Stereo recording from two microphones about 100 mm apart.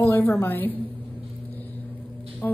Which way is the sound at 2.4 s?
20° left (ahead or behind).